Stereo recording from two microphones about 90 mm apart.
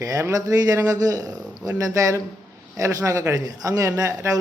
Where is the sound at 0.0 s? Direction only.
35° right (ahead or behind).